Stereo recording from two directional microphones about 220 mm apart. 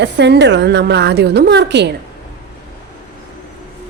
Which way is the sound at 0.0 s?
50° right (ahead or behind).